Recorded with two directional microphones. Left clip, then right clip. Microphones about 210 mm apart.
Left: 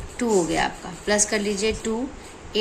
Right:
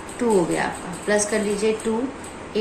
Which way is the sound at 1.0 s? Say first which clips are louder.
Right 1 dB; 50° left (ahead or behind).